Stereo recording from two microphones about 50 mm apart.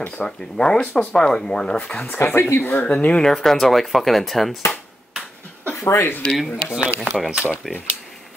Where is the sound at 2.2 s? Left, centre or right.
Left.